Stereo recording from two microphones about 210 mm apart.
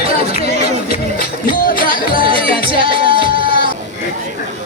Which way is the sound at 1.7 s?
45° left (ahead or behind).